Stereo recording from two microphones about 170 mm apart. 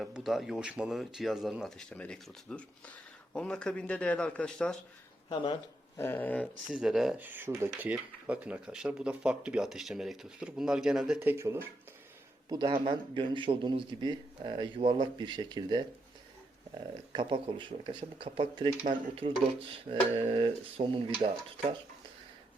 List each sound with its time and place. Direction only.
0.0 s speech: centre (ahead or behind)
5.3 s speech: 30° left (ahead or behind)
6.0 s speech: 10° left (ahead or behind)
6.7 s speech: 5° right (ahead or behind)
12.5 s speech: 25° right (ahead or behind)
17.1 s speech: 30° right (ahead or behind)